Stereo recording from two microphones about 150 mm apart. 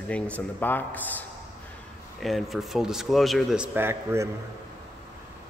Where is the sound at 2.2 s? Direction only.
Centre (ahead or behind).